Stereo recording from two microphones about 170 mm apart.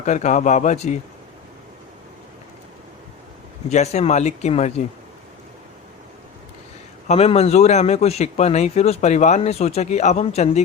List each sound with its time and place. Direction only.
0.0 s a man's voice: 45° left (ahead or behind)
3.7 s a man's voice: 40° left (ahead or behind)
7.1 s a man's voice: 40° left (ahead or behind)